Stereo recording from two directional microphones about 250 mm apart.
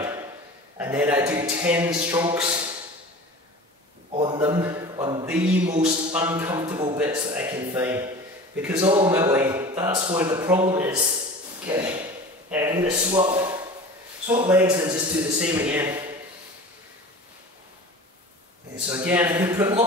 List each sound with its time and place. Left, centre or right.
0.7 s a man's voice: centre
4.1 s a sound: centre
5.3 s speech: centre
15.3 s a man's voice: centre
18.9 s speech: centre